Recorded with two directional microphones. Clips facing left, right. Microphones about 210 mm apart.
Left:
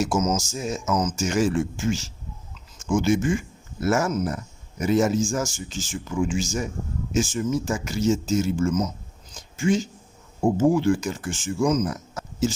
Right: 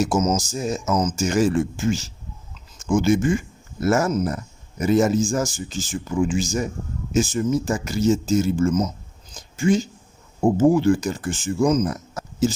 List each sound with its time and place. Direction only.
0.0 s speech: 35° right (ahead or behind)